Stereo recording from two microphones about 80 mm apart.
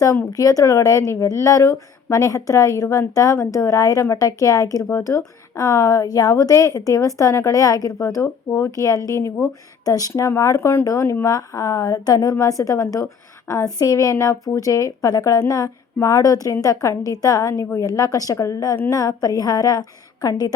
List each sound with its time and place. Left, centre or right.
0.3 s a woman's voice: left
9.8 s a woman's voice: left